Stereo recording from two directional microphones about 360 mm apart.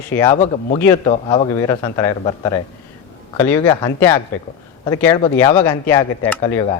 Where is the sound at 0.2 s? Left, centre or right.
Centre.